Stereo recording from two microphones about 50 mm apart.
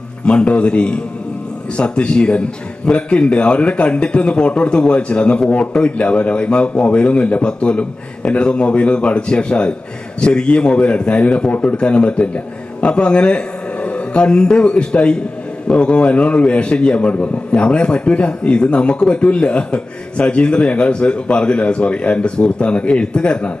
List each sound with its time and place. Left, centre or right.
0.3 s a man's voice: left